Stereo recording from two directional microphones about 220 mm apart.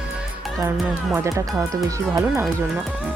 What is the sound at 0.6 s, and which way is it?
Speech, 10° right (ahead or behind).